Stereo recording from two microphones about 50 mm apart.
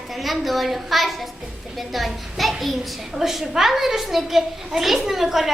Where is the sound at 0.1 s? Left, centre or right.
Centre.